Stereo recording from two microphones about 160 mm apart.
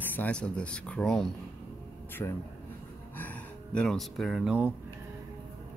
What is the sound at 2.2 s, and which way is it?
Speech, 15° left (ahead or behind).